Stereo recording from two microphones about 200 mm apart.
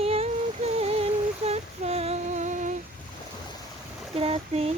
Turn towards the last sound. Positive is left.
turn(degrees=-30)  # may be behind; listen again after turning